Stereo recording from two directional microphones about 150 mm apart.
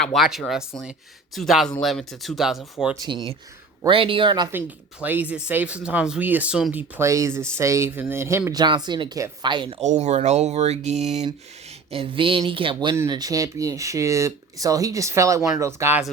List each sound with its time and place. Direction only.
0.0 s speech: centre (ahead or behind)
3.0 s speech: 25° right (ahead or behind)
4.5 s speech: 10° right (ahead or behind)
8.6 s speech: 30° right (ahead or behind)
9.9 s speech: 50° right (ahead or behind)
11.9 s speech: 35° right (ahead or behind); by 16.0 s 20° right (ahead or behind)